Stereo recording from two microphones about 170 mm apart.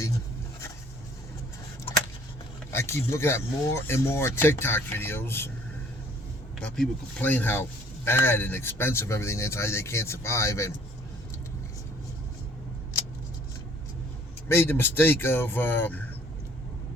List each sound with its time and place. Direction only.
2.7 s speech: 15° left (ahead or behind)
6.7 s speech: 10° left (ahead or behind)
14.4 s speech: 15° left (ahead or behind)